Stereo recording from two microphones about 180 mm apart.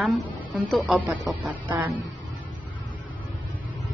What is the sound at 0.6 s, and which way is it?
A woman's voice, 5° right (ahead or behind).